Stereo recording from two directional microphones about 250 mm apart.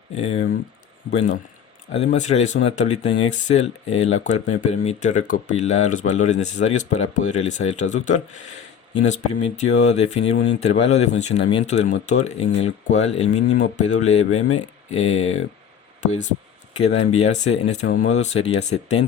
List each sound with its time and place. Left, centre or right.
0.2 s speech: left
1.9 s speech: left
10.3 s speech: left
10.6 s speech: left
16.7 s speech: left